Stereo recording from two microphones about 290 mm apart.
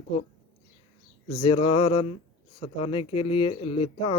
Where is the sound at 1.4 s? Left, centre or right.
Centre.